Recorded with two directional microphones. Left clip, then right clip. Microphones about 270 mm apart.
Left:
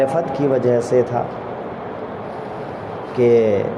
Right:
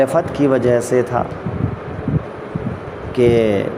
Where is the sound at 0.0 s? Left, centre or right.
Right.